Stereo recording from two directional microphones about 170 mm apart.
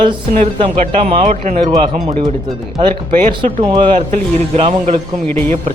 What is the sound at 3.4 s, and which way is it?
Speech, 30° right (ahead or behind).